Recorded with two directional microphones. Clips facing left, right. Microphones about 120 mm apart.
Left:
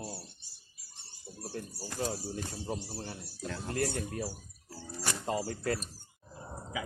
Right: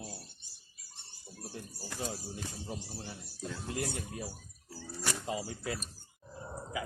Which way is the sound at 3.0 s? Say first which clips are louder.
Left 3 dB; 65° left (ahead or behind).